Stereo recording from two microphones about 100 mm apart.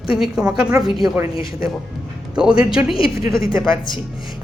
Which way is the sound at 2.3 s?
10° right (ahead or behind).